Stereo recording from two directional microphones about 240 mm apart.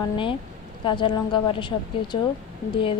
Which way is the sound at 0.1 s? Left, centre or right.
Left.